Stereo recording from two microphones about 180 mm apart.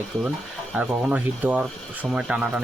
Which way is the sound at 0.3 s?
5° right (ahead or behind).